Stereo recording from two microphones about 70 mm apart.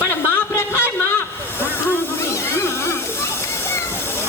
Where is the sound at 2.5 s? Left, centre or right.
Left.